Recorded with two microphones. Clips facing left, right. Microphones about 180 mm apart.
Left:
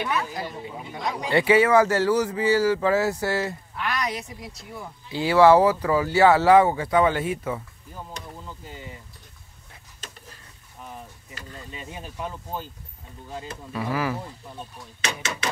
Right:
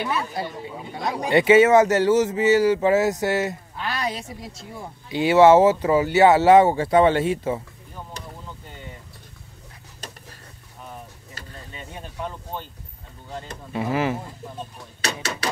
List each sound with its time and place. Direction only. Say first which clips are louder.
0.4 s speech: right 3 dB; 30° right (ahead or behind)
8.6 s vehicle: left 1 dB; 5° left (ahead or behind)
11.7 s speech: right 1 dB; 5° left (ahead or behind)
13.7 s speech: right 3 dB; 25° right (ahead or behind)
15.0 s a sound: right 2 dB; 40° right (ahead or behind)